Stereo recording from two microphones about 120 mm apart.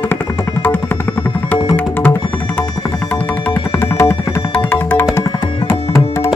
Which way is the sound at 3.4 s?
15° left (ahead or behind).